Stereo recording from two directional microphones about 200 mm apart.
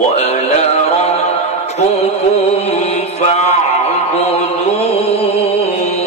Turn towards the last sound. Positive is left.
turn(degrees=30)  # may be behind; listen again after turning